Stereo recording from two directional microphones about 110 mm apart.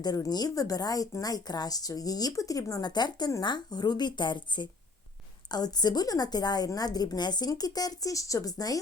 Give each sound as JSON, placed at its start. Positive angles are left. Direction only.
{"t": 0.0, "sound": "speech", "side_deg": 40}